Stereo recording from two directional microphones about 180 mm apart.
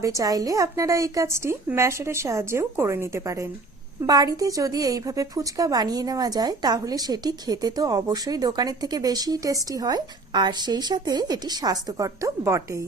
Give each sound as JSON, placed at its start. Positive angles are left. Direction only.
{"t": 0.0, "sound": "a woman's voice", "side_deg": -20}